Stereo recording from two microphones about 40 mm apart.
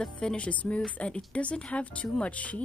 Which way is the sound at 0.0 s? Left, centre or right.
Centre.